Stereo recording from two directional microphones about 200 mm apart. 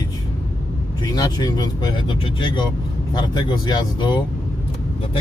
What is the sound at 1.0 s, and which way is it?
A man's voice, 20° left (ahead or behind).